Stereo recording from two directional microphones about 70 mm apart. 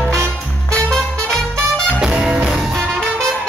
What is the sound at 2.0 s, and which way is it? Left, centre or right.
Music, centre.